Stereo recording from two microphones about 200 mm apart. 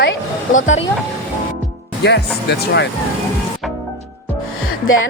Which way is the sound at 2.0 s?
60° left (ahead or behind).